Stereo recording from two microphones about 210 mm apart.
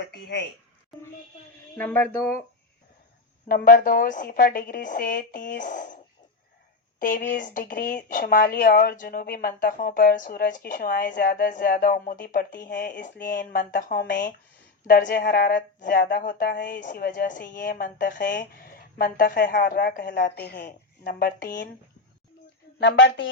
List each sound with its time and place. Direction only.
0.1 s speech: 55° left (ahead or behind)
1.7 s speech: 10° left (ahead or behind)
3.5 s a woman's voice: 40° left (ahead or behind)
7.0 s a woman's voice: 45° left (ahead or behind)
22.8 s a woman's voice: 55° left (ahead or behind)